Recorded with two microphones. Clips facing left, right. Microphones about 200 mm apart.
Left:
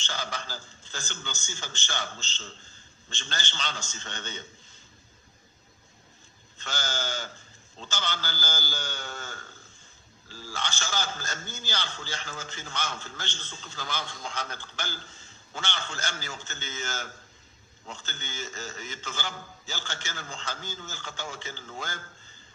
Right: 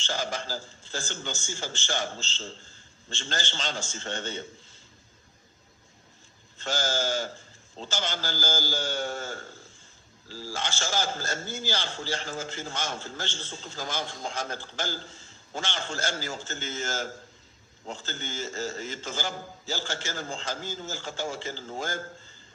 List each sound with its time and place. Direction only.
0.4 s a man's voice: 30° right (ahead or behind)
6.6 s a man's voice: 30° right (ahead or behind)
8.0 s a man's voice: 45° right (ahead or behind)
13.7 s a man's voice: 45° right (ahead or behind)
14.0 s a man's voice: 30° right (ahead or behind)
14.3 s a man's voice: 45° right (ahead or behind)
14.6 s a man's voice: 35° right (ahead or behind)
21.7 s a man's voice: 45° right (ahead or behind)